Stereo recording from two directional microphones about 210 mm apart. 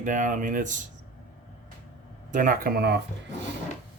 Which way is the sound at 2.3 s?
40° right (ahead or behind).